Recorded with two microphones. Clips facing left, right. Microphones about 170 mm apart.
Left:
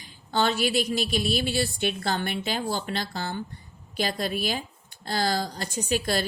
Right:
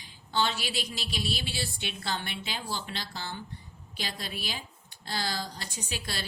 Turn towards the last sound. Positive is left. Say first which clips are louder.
# left 12 dB
turn(degrees=45)  # may be behind; listen again after turning